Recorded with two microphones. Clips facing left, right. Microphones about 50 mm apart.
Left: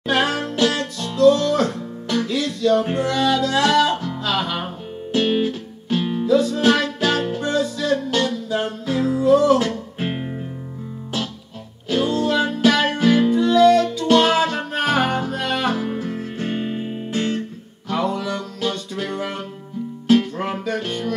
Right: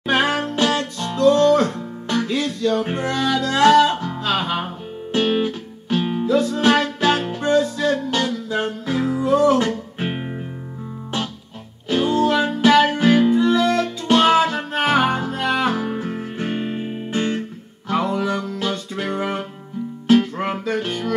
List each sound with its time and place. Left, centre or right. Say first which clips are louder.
0.0 s music: right 1 dB; right
11.9 s music: right 2 dB; right
16.6 s music: even; centre
17.1 s music: right 1 dB; right